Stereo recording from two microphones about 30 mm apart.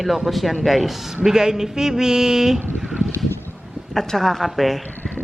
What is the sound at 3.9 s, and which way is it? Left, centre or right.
Speech, centre.